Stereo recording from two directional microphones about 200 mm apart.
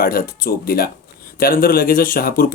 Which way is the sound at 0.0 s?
45° left (ahead or behind).